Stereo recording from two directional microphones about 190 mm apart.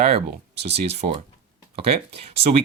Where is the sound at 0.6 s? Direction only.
35° right (ahead or behind).